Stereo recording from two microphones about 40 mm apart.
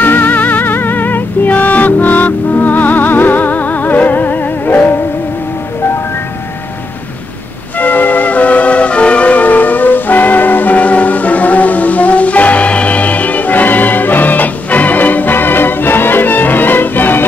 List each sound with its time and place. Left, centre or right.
0.0 s music: left
7.8 s music: left